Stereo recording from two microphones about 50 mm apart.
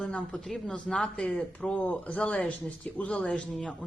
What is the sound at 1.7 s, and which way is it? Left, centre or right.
Speech, left.